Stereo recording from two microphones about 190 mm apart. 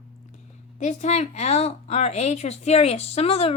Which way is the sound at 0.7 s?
35° left (ahead or behind).